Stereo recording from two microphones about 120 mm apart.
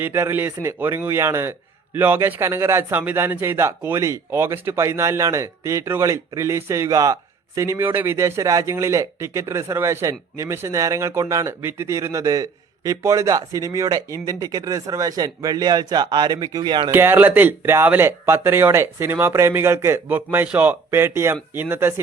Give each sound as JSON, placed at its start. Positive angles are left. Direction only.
{"t": 0.0, "sound": "a man's voice", "side_deg": -20}
{"t": 16.9, "sound": "a man's voice", "side_deg": -20}